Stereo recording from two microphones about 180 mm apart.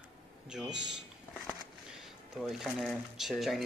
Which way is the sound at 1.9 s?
Centre (ahead or behind).